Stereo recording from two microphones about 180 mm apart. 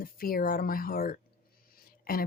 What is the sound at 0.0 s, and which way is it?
A woman's voice, 55° left (ahead or behind).